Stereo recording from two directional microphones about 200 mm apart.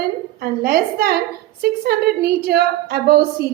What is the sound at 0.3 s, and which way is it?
A woman's voice, 50° right (ahead or behind).